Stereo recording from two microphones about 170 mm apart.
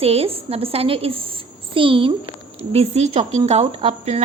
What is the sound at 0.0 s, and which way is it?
Speech, 35° right (ahead or behind).